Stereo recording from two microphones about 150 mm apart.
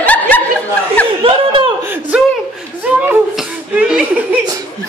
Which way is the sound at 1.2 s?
35° right (ahead or behind).